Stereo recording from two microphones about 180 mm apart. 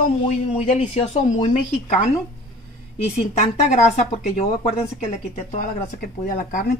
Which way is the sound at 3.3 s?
40° left (ahead or behind).